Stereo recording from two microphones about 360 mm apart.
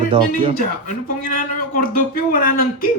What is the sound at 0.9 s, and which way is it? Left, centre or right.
A man's voice, left.